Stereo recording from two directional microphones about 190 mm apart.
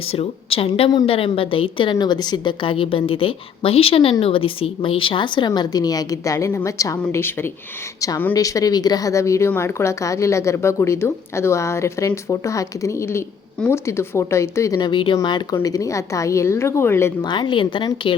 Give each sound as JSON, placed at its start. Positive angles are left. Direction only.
{"t": 0.1, "sound": "a woman's voice", "side_deg": 30}
{"t": 17.2, "sound": "a woman's voice", "side_deg": 25}